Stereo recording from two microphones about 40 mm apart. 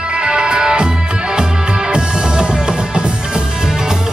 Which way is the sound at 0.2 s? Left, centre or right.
Centre.